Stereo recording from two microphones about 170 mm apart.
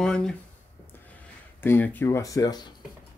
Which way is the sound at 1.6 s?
10° left (ahead or behind).